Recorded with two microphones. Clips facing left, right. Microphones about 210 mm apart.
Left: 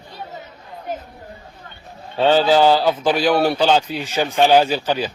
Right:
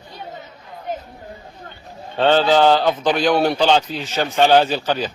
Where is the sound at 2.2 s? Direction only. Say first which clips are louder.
Even; 5° left (ahead or behind).